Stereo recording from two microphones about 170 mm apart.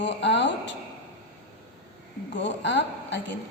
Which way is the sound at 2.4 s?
90° left.